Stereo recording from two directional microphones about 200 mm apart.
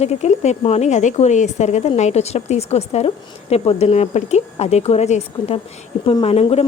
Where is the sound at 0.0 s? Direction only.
35° left (ahead or behind).